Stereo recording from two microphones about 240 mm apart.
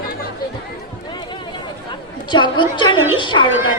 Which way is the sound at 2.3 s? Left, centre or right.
Centre.